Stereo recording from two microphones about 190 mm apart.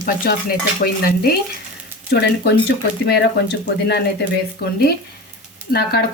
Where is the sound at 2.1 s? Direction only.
55° left (ahead or behind).